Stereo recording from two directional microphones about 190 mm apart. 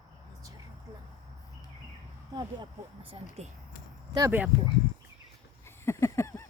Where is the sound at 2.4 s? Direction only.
25° right (ahead or behind).